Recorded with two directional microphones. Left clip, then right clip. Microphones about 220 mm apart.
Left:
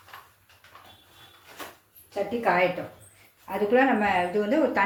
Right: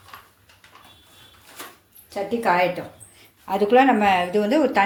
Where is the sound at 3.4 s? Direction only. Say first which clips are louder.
Right 6 dB; 40° right (ahead or behind).